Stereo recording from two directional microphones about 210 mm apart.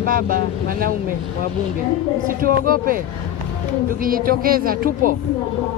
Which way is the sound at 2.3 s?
40° right (ahead or behind).